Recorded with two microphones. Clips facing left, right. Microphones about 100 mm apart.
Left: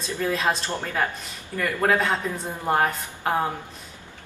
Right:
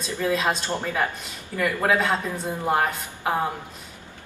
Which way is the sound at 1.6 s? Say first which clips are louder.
Even; 5° right (ahead or behind).